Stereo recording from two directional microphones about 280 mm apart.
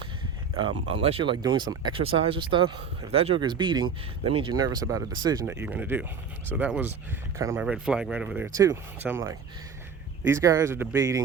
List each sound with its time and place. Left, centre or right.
0.9 s speech: right